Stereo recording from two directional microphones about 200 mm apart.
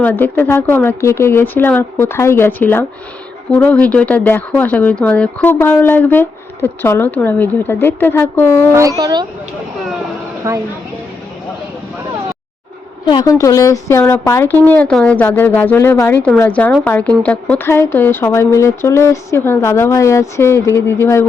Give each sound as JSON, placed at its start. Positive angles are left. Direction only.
{"t": 0.0, "sound": "speech", "side_deg": 10}
{"t": 8.7, "sound": "speech", "side_deg": -15}
{"t": 10.5, "sound": "speech", "side_deg": -15}
{"t": 13.1, "sound": "speech", "side_deg": 20}